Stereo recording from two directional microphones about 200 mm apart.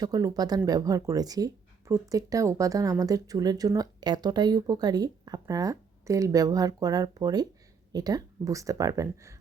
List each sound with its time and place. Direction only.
0.0 s speech: 20° right (ahead or behind)